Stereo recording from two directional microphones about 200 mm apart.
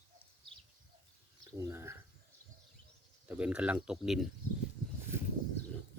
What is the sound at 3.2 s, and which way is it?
Speech, 5° right (ahead or behind).